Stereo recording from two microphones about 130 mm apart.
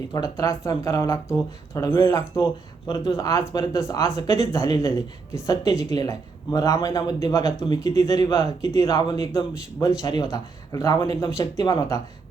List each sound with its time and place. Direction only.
0.1 s a man's voice: 25° left (ahead or behind)